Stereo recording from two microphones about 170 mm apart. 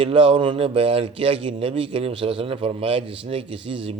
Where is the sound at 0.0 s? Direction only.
30° right (ahead or behind).